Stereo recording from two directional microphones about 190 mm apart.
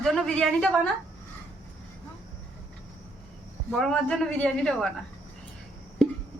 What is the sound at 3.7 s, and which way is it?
A woman's voice, 5° left (ahead or behind).